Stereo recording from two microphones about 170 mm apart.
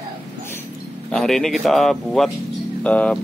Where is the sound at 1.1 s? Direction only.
Centre (ahead or behind).